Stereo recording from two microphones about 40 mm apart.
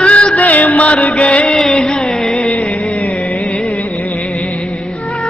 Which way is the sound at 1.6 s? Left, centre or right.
Centre.